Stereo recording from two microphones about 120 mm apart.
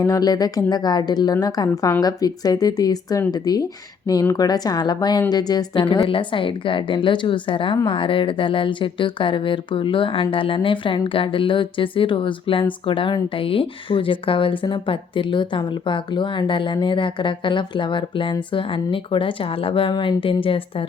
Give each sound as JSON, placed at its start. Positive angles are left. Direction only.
{"t": 0.0, "sound": "speech", "side_deg": 30}